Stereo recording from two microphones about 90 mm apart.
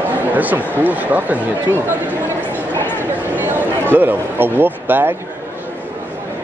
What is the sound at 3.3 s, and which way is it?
Speech, 20° right (ahead or behind).